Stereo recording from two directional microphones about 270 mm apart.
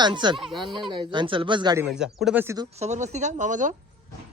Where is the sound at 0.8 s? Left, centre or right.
Centre.